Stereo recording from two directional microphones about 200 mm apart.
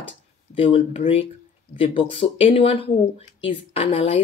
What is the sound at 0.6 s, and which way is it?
Speech, 30° left (ahead or behind).